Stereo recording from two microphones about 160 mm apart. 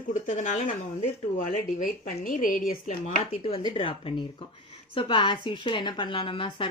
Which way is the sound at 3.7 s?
35° left (ahead or behind).